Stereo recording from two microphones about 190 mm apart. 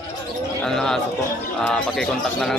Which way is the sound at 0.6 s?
5° left (ahead or behind).